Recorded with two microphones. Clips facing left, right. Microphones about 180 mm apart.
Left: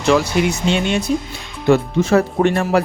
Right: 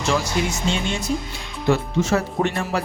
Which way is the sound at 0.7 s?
65° left (ahead or behind).